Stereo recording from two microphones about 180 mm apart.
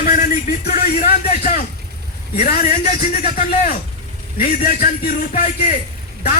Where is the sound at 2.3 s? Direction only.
45° left (ahead or behind).